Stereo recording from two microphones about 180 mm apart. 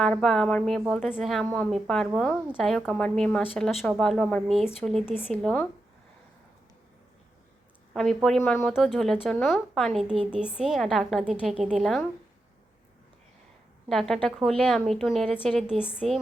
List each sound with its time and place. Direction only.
0.0 s a woman's voice: centre (ahead or behind)
7.9 s a woman's voice: centre (ahead or behind)
13.8 s a woman's voice: centre (ahead or behind)